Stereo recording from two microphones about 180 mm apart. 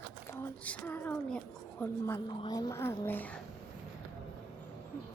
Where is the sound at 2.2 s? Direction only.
20° left (ahead or behind).